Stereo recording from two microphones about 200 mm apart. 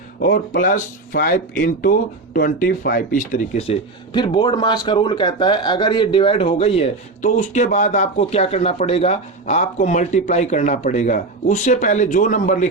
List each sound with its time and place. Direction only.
0.2 s speech: 45° left (ahead or behind)